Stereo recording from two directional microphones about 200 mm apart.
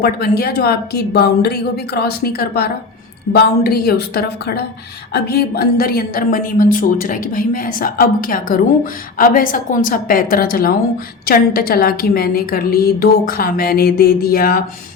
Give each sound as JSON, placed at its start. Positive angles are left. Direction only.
{"t": 0.0, "sound": "speech", "side_deg": 50}